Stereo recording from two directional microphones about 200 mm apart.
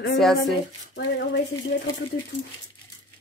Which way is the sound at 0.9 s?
60° left (ahead or behind).